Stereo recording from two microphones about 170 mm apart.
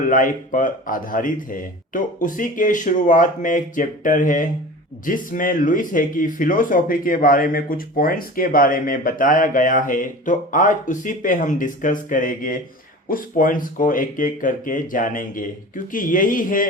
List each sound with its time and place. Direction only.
0.1 s speech: 50° left (ahead or behind)